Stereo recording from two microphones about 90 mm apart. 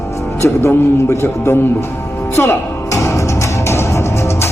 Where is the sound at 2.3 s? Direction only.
25° left (ahead or behind).